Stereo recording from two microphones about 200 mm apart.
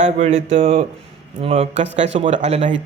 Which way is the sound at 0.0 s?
35° right (ahead or behind).